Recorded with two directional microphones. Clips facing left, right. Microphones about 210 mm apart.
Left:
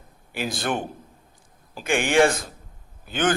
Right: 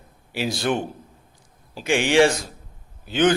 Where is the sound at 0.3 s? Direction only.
50° left (ahead or behind).